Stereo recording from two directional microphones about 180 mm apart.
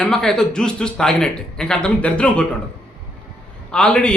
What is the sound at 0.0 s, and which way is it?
A man's voice, 5° left (ahead or behind).